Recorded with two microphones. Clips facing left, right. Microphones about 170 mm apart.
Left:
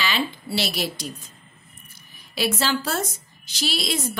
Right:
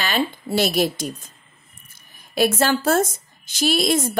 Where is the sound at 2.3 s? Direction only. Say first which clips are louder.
Right 5 dB; 50° right (ahead or behind).